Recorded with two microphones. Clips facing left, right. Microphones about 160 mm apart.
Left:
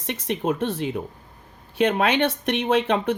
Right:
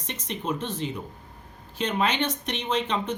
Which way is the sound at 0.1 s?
60° left (ahead or behind).